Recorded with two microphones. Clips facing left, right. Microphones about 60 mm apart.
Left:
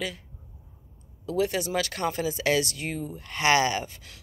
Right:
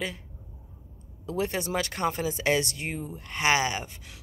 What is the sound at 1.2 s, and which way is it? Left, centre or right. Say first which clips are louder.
Speech: left 3 dB; right.